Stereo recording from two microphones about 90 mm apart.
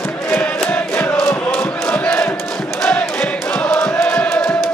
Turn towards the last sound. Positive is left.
turn(degrees=15)  # may be behind; listen again after turning